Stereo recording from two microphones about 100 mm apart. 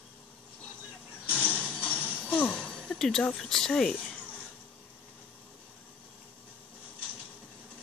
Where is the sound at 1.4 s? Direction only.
15° left (ahead or behind).